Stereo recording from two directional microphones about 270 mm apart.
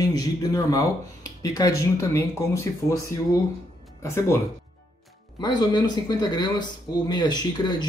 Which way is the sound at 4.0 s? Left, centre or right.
Centre.